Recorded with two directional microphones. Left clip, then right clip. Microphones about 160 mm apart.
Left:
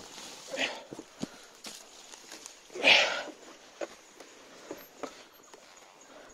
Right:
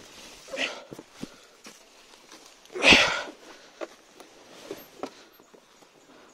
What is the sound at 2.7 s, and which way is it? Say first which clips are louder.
Sniff: right 5 dB; 30° right (ahead or behind).